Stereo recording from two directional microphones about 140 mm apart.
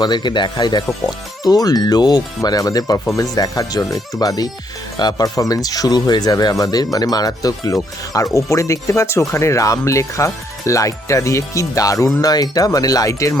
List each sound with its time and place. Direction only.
0.0 s speech: 30° left (ahead or behind)